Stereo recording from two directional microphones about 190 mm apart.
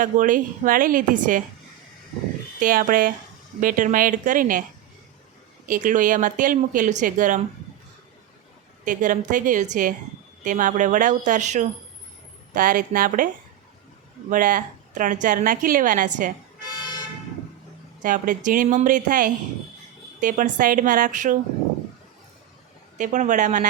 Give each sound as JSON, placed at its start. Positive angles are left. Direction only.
{"t": 0.0, "sound": "a woman's voice", "side_deg": -45}
{"t": 2.6, "sound": "a woman's voice", "side_deg": -45}
{"t": 5.6, "sound": "a woman's voice", "side_deg": -45}
{"t": 8.8, "sound": "a woman's voice", "side_deg": -45}
{"t": 18.0, "sound": "a woman's voice", "side_deg": -45}
{"t": 23.0, "sound": "speech", "side_deg": -40}